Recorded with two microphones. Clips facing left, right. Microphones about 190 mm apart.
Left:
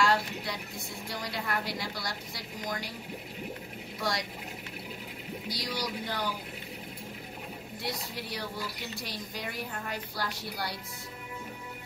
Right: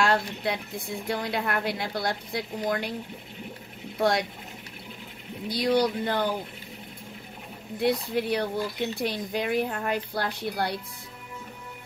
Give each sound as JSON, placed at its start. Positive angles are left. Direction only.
{"t": 0.0, "sound": "speech", "side_deg": -55}
{"t": 4.0, "sound": "speech", "side_deg": -55}
{"t": 5.5, "sound": "speech", "side_deg": -55}
{"t": 7.8, "sound": "speech", "side_deg": -55}